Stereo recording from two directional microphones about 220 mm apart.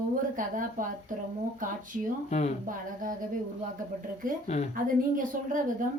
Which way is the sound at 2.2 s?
30° left (ahead or behind).